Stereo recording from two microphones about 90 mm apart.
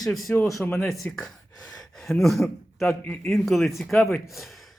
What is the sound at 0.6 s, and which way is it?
Speech, 25° left (ahead or behind).